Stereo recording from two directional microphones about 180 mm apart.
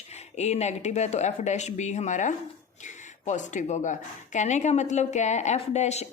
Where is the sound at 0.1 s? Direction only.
40° left (ahead or behind).